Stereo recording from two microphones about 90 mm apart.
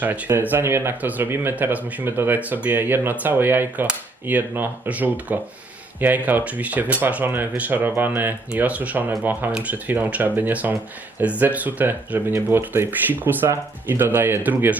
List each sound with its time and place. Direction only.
0.0 s speech: 20° right (ahead or behind)